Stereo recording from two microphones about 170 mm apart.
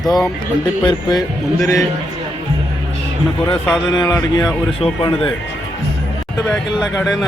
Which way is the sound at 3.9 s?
20° left (ahead or behind).